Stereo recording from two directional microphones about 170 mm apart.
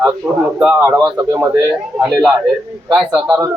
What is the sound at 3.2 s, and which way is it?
Speech, 25° right (ahead or behind).